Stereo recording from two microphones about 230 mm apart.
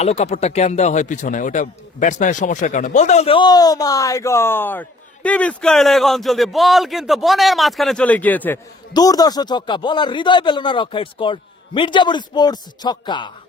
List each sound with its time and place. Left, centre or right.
0.0 s speech: left